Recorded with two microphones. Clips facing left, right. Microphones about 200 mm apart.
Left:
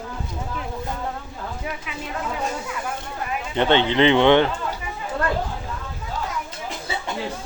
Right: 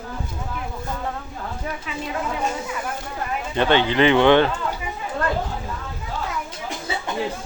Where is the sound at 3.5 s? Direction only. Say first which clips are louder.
Even; 20° left (ahead or behind).